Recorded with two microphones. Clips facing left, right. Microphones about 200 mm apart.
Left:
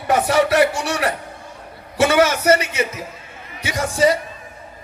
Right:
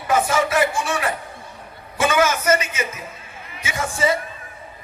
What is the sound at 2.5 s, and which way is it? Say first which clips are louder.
Speech: left 4 dB; 65° left (ahead or behind).